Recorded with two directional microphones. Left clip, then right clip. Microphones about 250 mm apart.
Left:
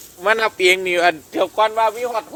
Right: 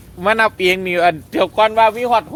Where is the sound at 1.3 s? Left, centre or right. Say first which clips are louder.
Right 4 dB; centre.